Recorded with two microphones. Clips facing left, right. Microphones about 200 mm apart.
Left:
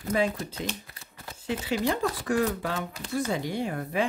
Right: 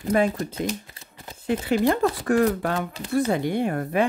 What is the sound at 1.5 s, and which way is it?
Speech, 55° right (ahead or behind).